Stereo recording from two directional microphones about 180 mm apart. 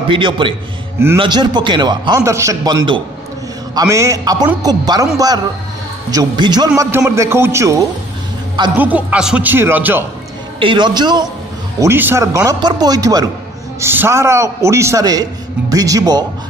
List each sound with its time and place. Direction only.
0.1 s a man's voice: 30° right (ahead or behind)
7.1 s a man's voice: 15° right (ahead or behind)
10.6 s a man's voice: 25° right (ahead or behind)
11.8 s a man's voice: 10° right (ahead or behind)